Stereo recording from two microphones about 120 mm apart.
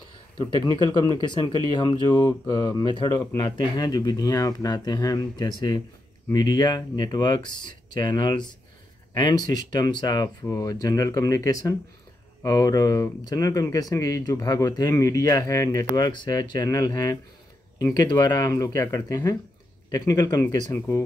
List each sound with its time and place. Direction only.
0.4 s speech: 35° left (ahead or behind)